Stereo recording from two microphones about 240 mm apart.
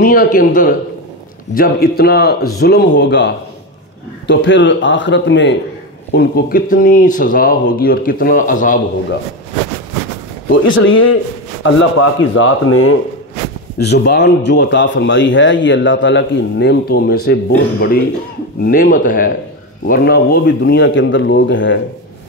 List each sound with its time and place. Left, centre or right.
0.0 s a man's voice: left
6.1 s speech: left
10.5 s speech: left
13.7 s a man's voice: left